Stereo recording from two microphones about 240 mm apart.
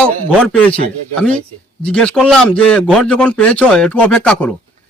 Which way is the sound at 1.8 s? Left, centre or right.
Centre.